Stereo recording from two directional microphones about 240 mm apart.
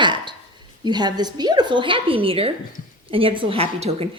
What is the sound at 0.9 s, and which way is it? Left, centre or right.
A woman's voice, centre.